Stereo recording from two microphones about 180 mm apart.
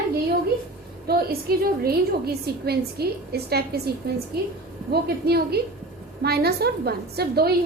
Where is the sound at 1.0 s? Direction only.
60° right (ahead or behind).